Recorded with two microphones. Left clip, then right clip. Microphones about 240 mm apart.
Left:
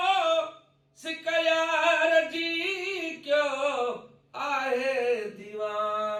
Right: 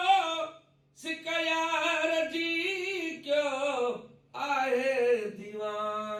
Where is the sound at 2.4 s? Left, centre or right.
Left.